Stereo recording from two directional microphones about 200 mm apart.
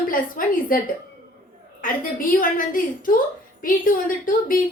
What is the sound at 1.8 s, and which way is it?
Speech, 45° left (ahead or behind).